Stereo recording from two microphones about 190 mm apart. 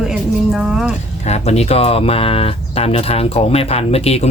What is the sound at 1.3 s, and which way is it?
Speech, 35° left (ahead or behind).